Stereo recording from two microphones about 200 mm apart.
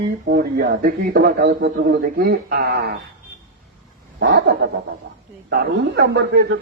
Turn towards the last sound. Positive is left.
turn(degrees=-60)  # may be behind; listen again after turning